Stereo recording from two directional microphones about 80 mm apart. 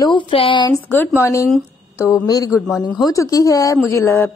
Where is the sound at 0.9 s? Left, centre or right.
Left.